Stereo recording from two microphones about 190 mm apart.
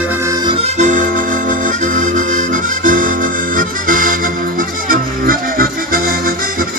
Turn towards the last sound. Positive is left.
turn(degrees=-50)  # may be behind; listen again after turning